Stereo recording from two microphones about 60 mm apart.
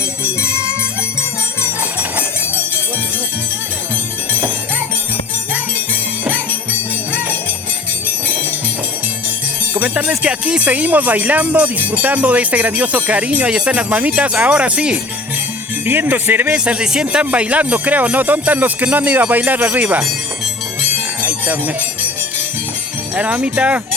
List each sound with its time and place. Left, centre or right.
0.4 s music: right
1.8 s a sound: right
4.3 s music: right
5.9 s jingle bell: right
9.7 s speech: right
10.1 s speech: centre
15.9 s speech: right
16.5 s speech: centre
21.2 s jingle bell: right
23.1 s speech: right